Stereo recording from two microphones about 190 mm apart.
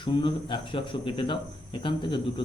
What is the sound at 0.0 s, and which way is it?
Speech, 25° left (ahead or behind).